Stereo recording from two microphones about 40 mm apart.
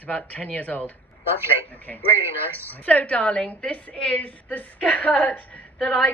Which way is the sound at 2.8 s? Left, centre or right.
Left.